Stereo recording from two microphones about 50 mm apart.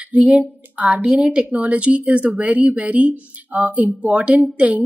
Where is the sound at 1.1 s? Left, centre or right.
Centre.